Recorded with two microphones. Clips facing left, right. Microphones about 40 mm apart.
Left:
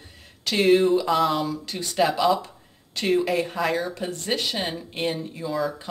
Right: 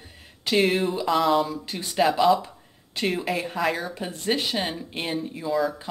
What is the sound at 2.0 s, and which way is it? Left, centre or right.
Speech, centre.